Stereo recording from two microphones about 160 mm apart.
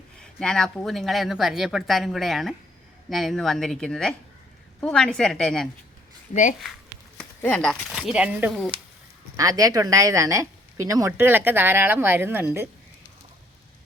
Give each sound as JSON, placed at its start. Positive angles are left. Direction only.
{"t": 0.2, "sound": "speech", "side_deg": 5}
{"t": 7.6, "sound": "speech", "side_deg": 0}
{"t": 9.3, "sound": "a woman's voice", "side_deg": -20}